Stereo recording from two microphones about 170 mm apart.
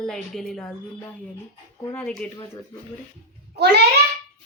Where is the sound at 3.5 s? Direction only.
80° right.